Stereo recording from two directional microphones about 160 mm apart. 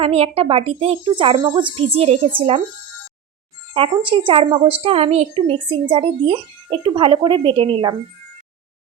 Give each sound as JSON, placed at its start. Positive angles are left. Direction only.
{"t": 0.0, "sound": "speech", "side_deg": -35}
{"t": 3.9, "sound": "speech", "side_deg": -30}